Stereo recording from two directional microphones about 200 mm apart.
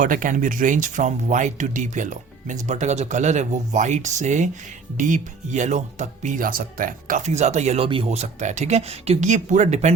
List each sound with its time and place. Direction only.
0.0 s speech: 40° right (ahead or behind)